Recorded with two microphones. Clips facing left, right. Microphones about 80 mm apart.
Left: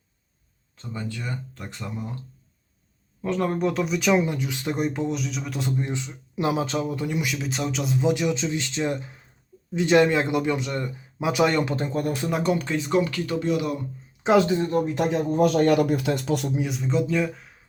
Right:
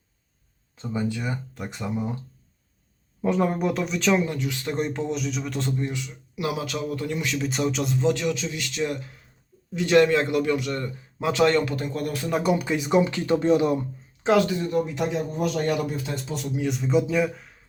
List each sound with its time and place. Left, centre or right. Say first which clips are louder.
0.8 s speech: right 6 dB; centre
3.2 s speech: right 1 dB; centre
5.8 s a man's voice: even; left; by 8.0 s centre
8.0 s a man's voice: left 1 dB; centre
12.3 s speech: right 3 dB; centre; by 13.7 s right
14.3 s speech: left 2 dB; left
16.6 s speech: right 2 dB; centre